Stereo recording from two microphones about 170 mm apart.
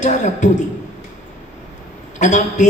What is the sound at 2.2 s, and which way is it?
Speech, 45° left (ahead or behind).